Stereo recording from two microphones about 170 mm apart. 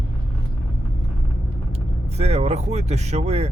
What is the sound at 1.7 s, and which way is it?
Speech, 35° right (ahead or behind).